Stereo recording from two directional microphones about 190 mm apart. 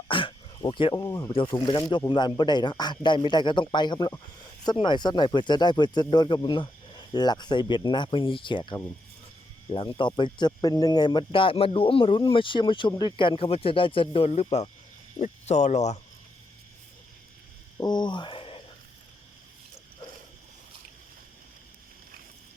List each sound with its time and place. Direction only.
0.1 s dog: 25° left (ahead or behind)
1.3 s speech: 25° left (ahead or behind)
17.7 s speech: 20° left (ahead or behind)